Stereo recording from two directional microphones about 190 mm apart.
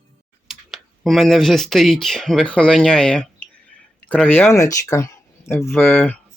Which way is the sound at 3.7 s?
5° left (ahead or behind).